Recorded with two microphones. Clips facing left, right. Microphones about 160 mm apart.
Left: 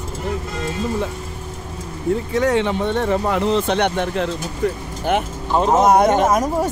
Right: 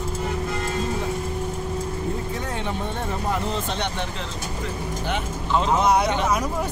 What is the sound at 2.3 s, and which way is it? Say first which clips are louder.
Speech: left 11 dB; 90° left.